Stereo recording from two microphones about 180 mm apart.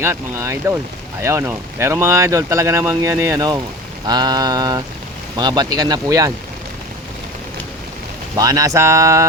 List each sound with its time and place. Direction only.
0.0 s speech: 15° right (ahead or behind)
8.4 s speech: 20° right (ahead or behind)